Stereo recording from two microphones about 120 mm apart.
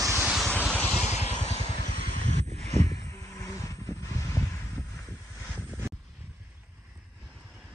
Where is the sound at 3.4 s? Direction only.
25° left (ahead or behind).